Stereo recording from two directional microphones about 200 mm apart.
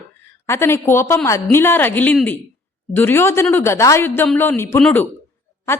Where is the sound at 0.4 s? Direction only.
15° left (ahead or behind).